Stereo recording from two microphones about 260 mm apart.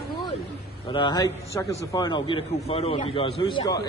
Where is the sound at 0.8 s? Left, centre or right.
Centre.